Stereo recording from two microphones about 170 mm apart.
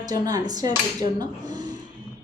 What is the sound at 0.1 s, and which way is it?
A woman's voice, 20° right (ahead or behind).